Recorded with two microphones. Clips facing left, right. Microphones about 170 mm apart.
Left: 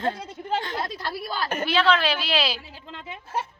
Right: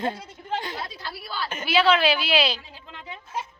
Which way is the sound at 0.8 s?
45° left (ahead or behind).